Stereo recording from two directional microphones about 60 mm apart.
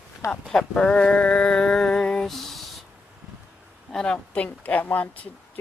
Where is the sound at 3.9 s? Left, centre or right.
Centre.